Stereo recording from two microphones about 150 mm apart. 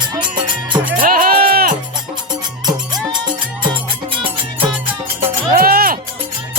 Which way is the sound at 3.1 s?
30° right (ahead or behind).